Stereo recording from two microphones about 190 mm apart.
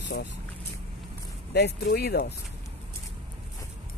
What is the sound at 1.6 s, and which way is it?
Speech, 60° left (ahead or behind).